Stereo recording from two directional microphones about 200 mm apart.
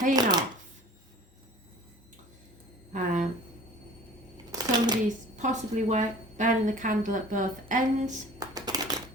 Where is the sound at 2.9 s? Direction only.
40° right (ahead or behind).